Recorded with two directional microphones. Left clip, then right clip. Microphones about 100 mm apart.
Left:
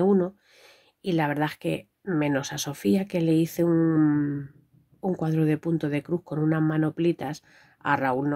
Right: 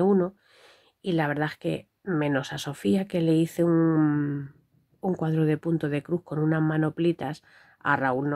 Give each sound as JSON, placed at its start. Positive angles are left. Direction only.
{"t": 0.0, "sound": "speech", "side_deg": -30}